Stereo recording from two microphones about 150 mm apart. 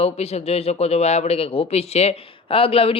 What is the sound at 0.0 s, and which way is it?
A man's voice, 45° left (ahead or behind).